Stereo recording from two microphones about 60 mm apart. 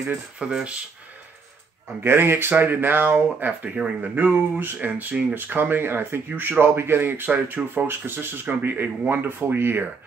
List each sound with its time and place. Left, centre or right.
0.1 s speech: centre
2.0 s speech: right